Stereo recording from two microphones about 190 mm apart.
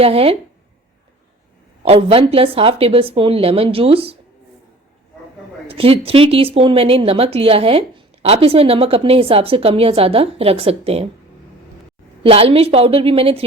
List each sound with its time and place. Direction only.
0.0 s speech: 30° right (ahead or behind)
1.8 s speech: 30° right (ahead or behind)
5.6 s speech: 30° right (ahead or behind)
12.2 s speech: 30° right (ahead or behind)